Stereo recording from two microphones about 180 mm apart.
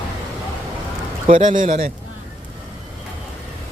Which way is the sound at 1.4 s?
45° right (ahead or behind).